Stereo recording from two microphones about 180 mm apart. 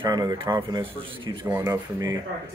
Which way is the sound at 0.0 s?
20° right (ahead or behind).